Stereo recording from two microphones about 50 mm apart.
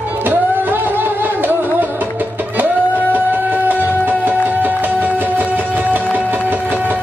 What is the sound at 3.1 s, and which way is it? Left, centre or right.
Music, right.